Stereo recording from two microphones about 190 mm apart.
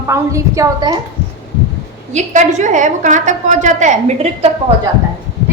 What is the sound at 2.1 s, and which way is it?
A woman's voice, 40° right (ahead or behind).